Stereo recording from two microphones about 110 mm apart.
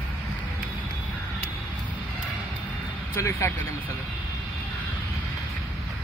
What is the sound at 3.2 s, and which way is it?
Speech, 25° left (ahead or behind).